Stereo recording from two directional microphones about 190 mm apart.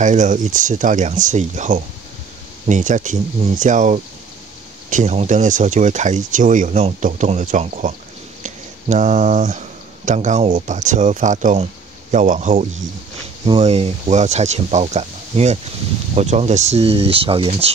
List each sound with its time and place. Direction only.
0.0 s speech: 40° right (ahead or behind)
8.4 s a sound: 40° right (ahead or behind)
10.0 s speech: 40° right (ahead or behind)